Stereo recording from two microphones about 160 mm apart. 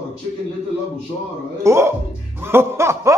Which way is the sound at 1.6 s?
15° right (ahead or behind).